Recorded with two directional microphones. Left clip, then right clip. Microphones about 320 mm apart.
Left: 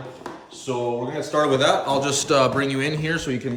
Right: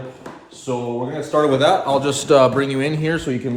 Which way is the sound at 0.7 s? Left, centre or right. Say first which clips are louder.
Right 1 dB; centre.